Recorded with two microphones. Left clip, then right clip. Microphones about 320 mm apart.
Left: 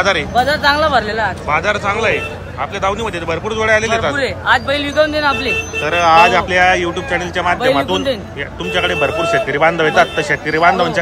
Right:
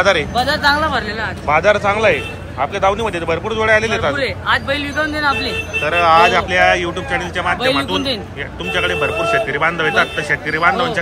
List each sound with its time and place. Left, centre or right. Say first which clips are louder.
0.0 s speech: left 1 dB; centre
0.7 s speech: left 4 dB; left
1.5 s a man's voice: right 5 dB; centre
4.1 s speech: left 3 dB; left
5.8 s speech: left 1 dB; centre